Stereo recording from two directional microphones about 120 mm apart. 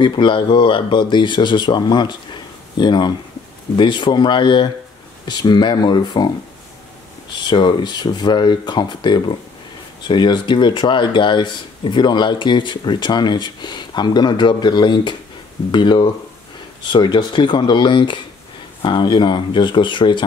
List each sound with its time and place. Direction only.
0.0 s speech: 40° left (ahead or behind)
7.3 s speech: 40° left (ahead or behind)